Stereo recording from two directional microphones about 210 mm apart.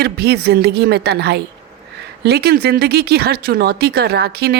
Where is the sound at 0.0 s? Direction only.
50° right (ahead or behind).